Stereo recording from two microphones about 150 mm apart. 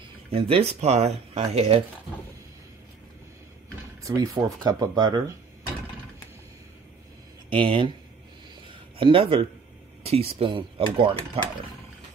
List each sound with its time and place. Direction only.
0.3 s speech: 40° right (ahead or behind)
4.0 s speech: 25° right (ahead or behind)
7.4 s speech: 35° right (ahead or behind)
8.9 s speech: 35° right (ahead or behind)